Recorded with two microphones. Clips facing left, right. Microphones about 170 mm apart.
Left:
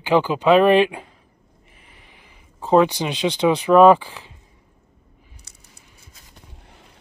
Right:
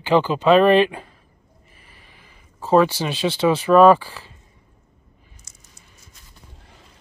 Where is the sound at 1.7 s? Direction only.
20° left (ahead or behind).